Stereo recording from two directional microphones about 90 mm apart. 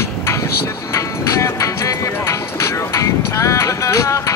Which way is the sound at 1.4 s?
35° left (ahead or behind).